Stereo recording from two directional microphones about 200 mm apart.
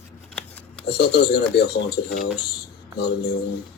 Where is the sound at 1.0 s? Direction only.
55° left (ahead or behind).